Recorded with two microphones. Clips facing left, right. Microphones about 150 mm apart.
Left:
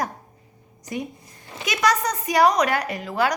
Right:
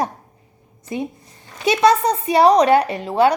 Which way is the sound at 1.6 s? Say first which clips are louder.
Right 8 dB; 25° right (ahead or behind).